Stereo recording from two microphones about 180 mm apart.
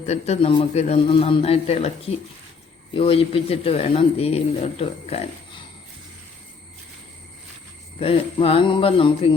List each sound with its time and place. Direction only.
0.0 s speech: 35° left (ahead or behind)
7.9 s speech: 35° left (ahead or behind)